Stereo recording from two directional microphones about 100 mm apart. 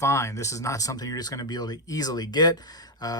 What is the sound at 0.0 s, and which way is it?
Speech, 30° left (ahead or behind).